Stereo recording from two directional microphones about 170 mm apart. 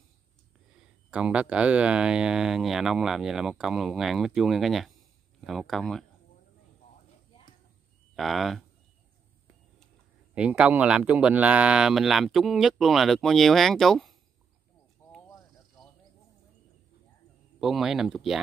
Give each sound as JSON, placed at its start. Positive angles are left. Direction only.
{"t": 0.7, "sound": "speech", "side_deg": -5}
{"t": 8.2, "sound": "speech", "side_deg": 0}
{"t": 10.3, "sound": "speech", "side_deg": -5}
{"t": 17.6, "sound": "speech", "side_deg": 0}